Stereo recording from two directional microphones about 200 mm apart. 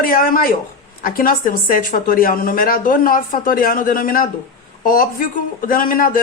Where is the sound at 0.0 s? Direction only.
45° left (ahead or behind).